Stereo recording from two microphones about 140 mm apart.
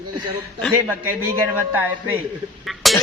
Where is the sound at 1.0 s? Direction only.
15° right (ahead or behind).